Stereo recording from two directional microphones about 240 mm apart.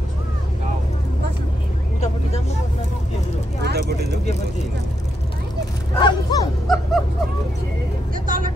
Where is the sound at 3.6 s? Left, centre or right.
Right.